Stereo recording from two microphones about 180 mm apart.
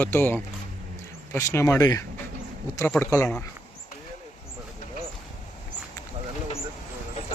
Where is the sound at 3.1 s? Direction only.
10° left (ahead or behind).